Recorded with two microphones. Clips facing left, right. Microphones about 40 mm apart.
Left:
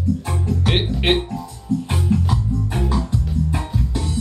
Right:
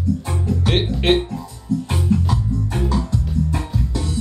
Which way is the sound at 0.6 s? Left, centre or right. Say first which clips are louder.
Right 1 dB; centre.